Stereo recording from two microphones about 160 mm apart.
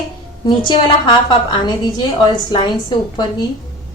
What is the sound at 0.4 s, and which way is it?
A woman's voice, 30° left (ahead or behind).